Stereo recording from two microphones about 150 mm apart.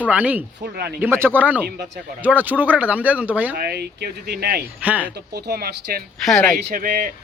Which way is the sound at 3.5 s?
90° right.